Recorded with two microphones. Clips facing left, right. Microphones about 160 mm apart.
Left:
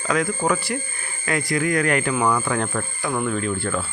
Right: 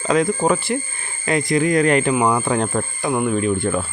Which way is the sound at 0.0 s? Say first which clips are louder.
Right 5 dB; 25° right (ahead or behind).